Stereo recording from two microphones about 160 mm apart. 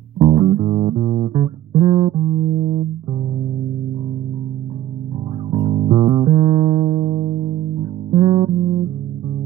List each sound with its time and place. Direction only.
0.2 s music: 35° right (ahead or behind)
5.5 s music: 35° right (ahead or behind)